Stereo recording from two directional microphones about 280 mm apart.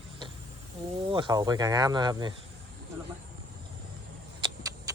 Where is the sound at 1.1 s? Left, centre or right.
Centre.